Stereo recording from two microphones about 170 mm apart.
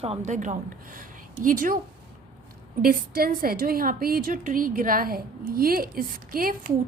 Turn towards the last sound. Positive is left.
turn(degrees=-60)  # may be behind; listen again after turning